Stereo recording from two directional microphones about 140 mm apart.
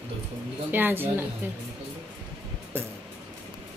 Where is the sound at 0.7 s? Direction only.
15° right (ahead or behind).